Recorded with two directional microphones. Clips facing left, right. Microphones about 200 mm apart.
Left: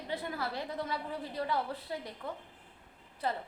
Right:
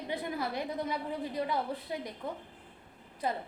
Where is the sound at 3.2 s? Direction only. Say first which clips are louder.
Right 1 dB; 15° right (ahead or behind).